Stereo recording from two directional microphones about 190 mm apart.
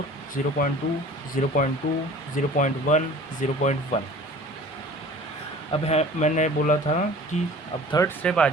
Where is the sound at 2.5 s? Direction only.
40° left (ahead or behind).